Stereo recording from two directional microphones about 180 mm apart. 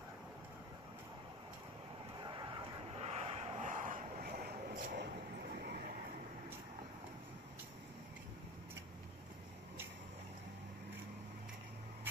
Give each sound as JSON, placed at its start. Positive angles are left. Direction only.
{"t": 2.1, "sound": "vehicle", "side_deg": -25}
{"t": 3.1, "sound": "vehicle", "side_deg": -35}